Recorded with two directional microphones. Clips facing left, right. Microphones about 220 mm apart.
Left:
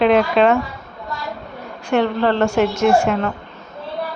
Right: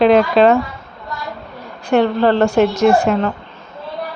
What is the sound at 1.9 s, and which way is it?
A woman's voice, 35° right (ahead or behind).